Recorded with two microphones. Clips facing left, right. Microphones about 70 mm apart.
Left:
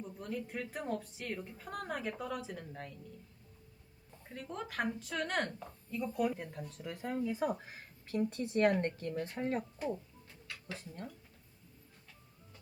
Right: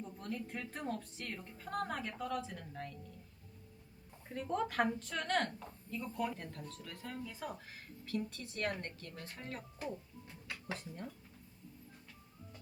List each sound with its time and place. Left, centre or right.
0.0 s a woman's voice: centre
4.3 s a woman's voice: centre
6.0 s speech: centre
10.2 s music: centre
10.8 s a woman's voice: centre